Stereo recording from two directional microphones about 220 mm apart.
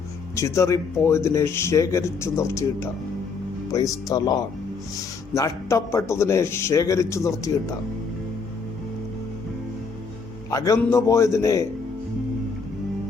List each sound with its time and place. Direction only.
0.3 s speech: 15° left (ahead or behind)
4.1 s speech: 20° left (ahead or behind)
5.3 s speech: 15° left (ahead or behind)
10.5 s speech: 15° left (ahead or behind)